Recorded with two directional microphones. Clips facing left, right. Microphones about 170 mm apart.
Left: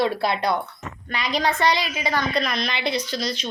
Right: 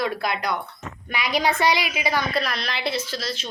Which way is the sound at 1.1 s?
5° right (ahead or behind).